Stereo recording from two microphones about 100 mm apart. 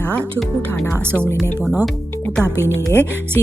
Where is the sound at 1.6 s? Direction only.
20° right (ahead or behind).